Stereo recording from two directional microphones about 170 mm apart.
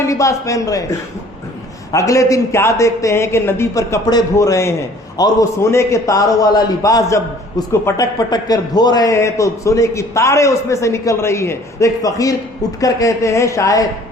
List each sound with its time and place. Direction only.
0.0 s a man's voice: 20° left (ahead or behind)